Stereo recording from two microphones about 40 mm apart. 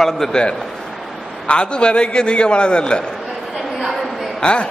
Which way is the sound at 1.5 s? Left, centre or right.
Left.